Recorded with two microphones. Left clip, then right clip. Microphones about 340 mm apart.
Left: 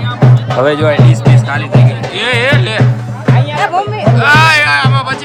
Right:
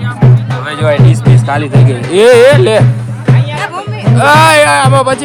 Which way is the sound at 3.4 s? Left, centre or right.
Left.